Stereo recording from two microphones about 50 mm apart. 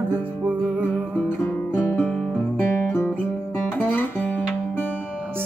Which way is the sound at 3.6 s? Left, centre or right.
Left.